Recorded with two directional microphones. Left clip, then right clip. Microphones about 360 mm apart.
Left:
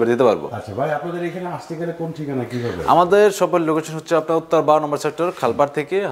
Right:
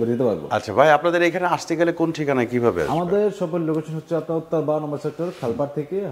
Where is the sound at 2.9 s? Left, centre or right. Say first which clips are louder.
Left 7 dB; centre.